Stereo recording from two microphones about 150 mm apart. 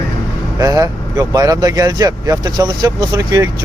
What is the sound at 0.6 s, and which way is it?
Speech, 20° right (ahead or behind).